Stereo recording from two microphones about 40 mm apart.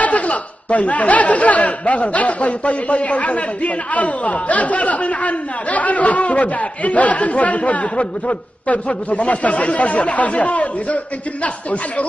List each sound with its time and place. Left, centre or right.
0.0 s speech: left